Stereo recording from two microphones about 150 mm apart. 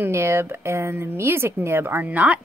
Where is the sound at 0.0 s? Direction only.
15° right (ahead or behind).